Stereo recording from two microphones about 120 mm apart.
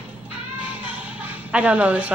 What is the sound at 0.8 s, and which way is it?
Music, 10° right (ahead or behind).